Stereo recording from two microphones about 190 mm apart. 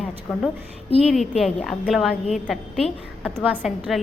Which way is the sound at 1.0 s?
Centre (ahead or behind).